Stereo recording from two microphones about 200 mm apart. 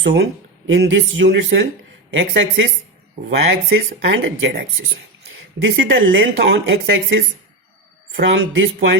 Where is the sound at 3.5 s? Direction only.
55° right (ahead or behind).